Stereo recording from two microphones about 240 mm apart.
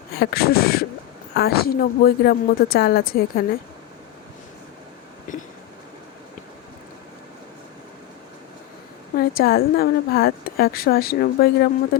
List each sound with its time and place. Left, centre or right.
0.1 s a woman's voice: left
5.3 s train: left
9.1 s a woman's voice: left